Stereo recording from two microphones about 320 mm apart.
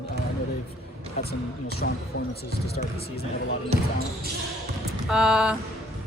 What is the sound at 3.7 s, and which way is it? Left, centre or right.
Speech, right.